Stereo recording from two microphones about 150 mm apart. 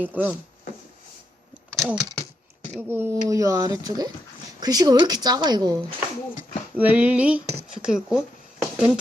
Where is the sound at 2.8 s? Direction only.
15° right (ahead or behind).